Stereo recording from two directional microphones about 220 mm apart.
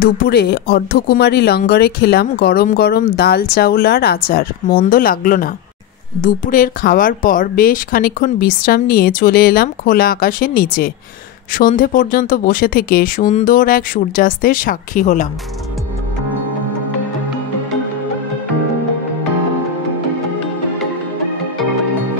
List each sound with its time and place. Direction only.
0.0 s a woman's voice: 45° left (ahead or behind)